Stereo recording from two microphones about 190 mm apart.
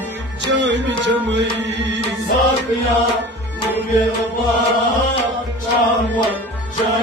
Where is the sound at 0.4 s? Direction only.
70° right (ahead or behind).